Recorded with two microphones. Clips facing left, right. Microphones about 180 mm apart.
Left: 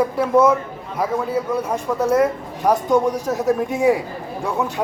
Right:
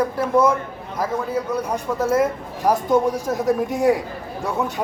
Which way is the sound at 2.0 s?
5° right (ahead or behind).